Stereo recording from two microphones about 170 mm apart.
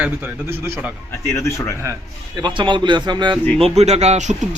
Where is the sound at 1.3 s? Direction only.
15° left (ahead or behind).